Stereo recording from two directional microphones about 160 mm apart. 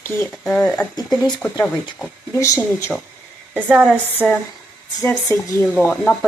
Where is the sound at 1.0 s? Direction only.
25° left (ahead or behind).